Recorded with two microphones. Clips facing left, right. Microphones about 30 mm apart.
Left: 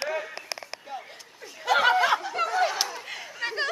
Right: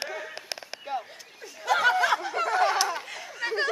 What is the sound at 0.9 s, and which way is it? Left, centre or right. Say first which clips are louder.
Speech: right 7 dB; right.